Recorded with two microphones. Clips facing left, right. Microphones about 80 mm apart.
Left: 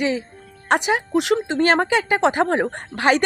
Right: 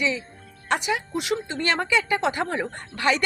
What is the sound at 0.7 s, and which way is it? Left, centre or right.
Speech, left.